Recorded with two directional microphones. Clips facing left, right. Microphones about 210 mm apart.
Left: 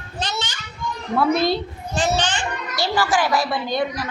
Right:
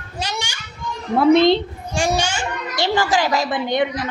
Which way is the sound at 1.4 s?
20° right (ahead or behind).